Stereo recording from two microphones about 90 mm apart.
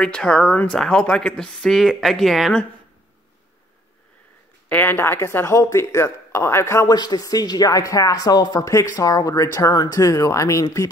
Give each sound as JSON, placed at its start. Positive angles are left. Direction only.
{"t": 0.0, "sound": "speech", "side_deg": 10}
{"t": 4.6, "sound": "speech", "side_deg": 20}
{"t": 6.9, "sound": "speech", "side_deg": 45}